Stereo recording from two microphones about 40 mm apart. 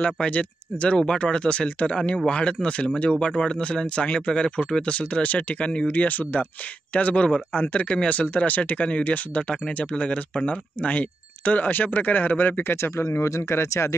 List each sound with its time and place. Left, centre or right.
0.0 s speech: left